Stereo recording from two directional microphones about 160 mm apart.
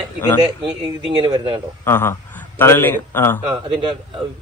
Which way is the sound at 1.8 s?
15° left (ahead or behind).